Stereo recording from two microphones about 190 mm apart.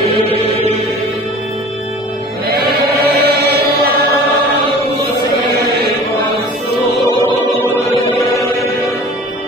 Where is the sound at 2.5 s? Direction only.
55° right (ahead or behind).